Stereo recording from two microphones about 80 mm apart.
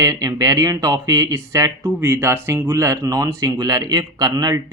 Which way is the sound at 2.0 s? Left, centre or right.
Right.